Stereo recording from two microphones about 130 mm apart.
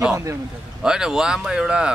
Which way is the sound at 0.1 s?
20° right (ahead or behind).